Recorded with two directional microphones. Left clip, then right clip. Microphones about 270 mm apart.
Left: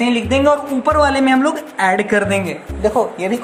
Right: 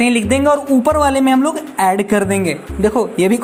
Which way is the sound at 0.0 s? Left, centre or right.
Right.